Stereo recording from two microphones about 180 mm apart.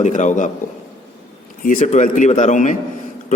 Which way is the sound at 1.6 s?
45° left (ahead or behind).